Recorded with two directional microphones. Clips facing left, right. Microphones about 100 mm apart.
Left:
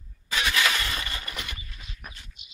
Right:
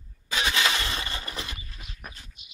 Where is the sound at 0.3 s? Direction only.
25° right (ahead or behind).